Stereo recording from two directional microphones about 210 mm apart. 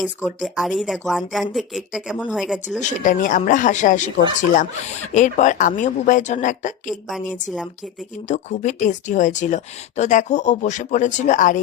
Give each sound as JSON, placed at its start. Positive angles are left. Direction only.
{"t": 0.4, "sound": "speech", "side_deg": 0}
{"t": 2.6, "sound": "speech", "side_deg": 35}
{"t": 8.3, "sound": "speech", "side_deg": 35}